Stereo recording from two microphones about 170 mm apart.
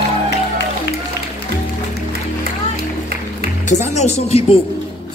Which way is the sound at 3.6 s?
45° left (ahead or behind).